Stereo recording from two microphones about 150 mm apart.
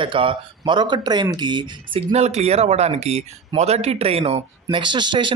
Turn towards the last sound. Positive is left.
turn(degrees=-30)  # may be behind; listen again after turning